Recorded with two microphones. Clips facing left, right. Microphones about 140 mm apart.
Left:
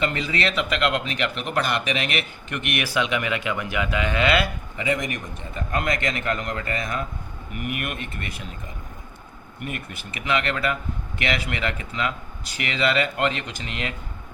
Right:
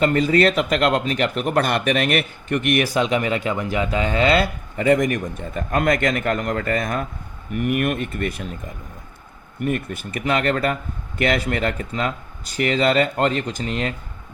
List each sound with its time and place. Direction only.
0.0 s speech: 45° right (ahead or behind)
4.8 s speech: 45° right (ahead or behind)
9.6 s speech: 45° right (ahead or behind)